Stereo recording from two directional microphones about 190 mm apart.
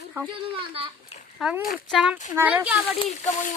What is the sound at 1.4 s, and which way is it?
A woman's voice, 5° right (ahead or behind).